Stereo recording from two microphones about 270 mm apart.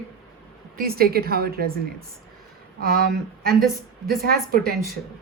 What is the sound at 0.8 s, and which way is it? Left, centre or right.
Speech, right.